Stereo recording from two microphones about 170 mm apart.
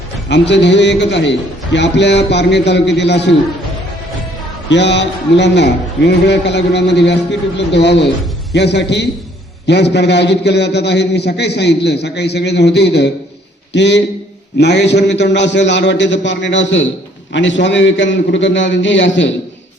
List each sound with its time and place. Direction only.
0.3 s a man's voice: 90° left
4.7 s a man's voice: 90° left